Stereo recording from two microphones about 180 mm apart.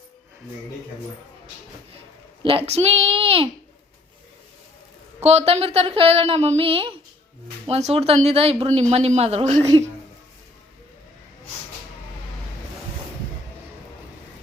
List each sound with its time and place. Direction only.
2.4 s speech: 30° right (ahead or behind)
5.2 s speech: 35° right (ahead or behind)